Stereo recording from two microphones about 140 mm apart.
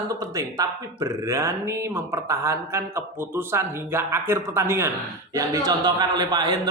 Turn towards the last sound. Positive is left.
turn(degrees=-30)  # may be behind; listen again after turning